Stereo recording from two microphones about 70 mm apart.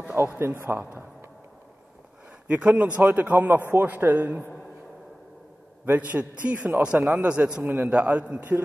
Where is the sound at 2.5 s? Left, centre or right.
Right.